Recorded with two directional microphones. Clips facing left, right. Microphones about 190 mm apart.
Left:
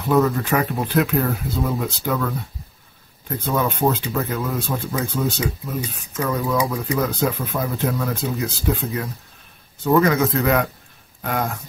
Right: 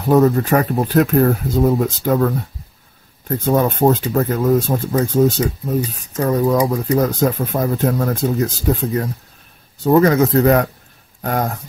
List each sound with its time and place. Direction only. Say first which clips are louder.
0.1 s speech: right 5 dB; 40° right (ahead or behind)